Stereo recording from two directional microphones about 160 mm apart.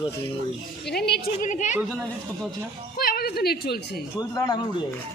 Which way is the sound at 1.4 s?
50° left (ahead or behind).